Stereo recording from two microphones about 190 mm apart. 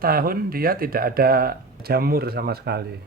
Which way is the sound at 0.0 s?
50° right (ahead or behind).